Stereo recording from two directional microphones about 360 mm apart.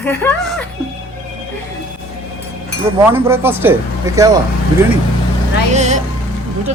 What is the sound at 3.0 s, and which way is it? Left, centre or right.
Speech, centre.